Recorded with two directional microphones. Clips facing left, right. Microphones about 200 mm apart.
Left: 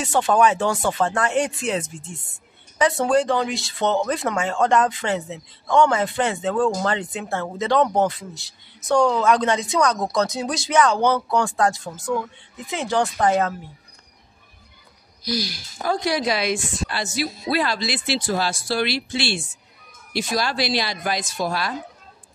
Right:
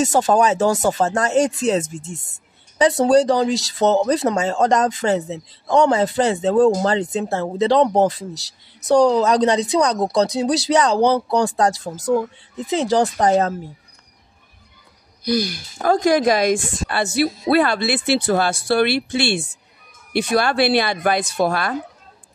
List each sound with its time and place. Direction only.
0.0 s speech: 40° right (ahead or behind)
15.2 s a woman's voice: 55° right (ahead or behind)